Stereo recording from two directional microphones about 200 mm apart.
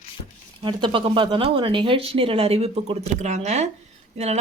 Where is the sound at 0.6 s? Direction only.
25° right (ahead or behind).